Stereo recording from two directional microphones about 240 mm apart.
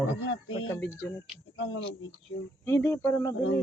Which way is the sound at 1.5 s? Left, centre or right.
Left.